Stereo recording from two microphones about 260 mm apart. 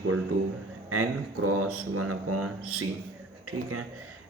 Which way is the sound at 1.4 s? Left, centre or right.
Right.